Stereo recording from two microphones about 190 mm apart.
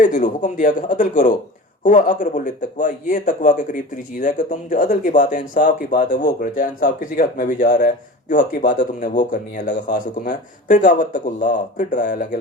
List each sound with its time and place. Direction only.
0.0 s speech: 45° left (ahead or behind)